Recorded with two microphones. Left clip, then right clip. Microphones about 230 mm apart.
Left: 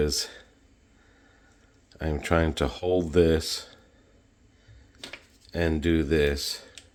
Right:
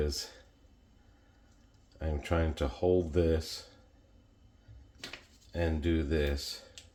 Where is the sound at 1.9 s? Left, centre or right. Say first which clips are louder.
Left 8 dB; left.